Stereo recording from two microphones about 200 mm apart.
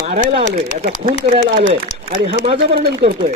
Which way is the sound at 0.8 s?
45° right (ahead or behind).